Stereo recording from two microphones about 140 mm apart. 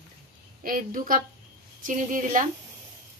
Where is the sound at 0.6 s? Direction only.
85° right.